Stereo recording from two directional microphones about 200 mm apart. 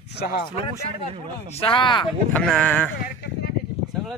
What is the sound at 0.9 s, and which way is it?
Speech, 30° right (ahead or behind).